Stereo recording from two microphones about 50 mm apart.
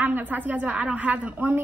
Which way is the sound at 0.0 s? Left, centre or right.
Right.